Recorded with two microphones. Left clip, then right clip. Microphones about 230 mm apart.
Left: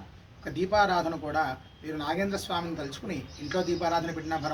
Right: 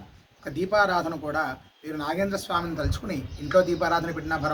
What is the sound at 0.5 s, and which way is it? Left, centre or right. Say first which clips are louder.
Speech: right 2 dB; centre.